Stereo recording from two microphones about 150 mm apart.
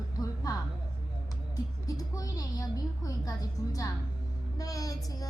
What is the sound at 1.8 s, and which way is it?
Speech, 25° left (ahead or behind).